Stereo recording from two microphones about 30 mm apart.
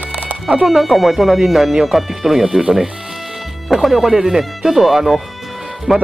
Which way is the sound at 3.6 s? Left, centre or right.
Centre.